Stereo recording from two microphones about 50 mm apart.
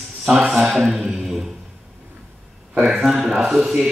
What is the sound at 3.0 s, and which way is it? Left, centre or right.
Speech, centre.